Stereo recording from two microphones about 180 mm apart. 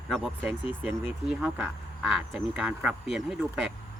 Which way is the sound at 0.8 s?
5° right (ahead or behind).